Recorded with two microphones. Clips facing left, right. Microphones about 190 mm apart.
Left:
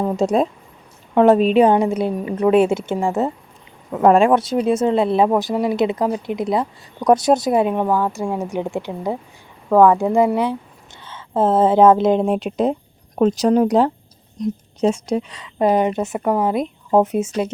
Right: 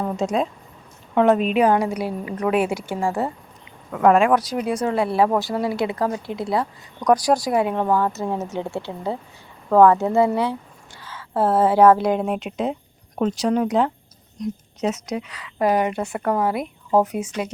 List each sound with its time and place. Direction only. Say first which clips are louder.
0.2 s a woman's voice: left 5 dB; 35° left (ahead or behind); by 7.9 s 20° left (ahead or behind)
7.9 s a woman's voice: left 1 dB; 10° left (ahead or behind); by 17.5 s 25° left (ahead or behind)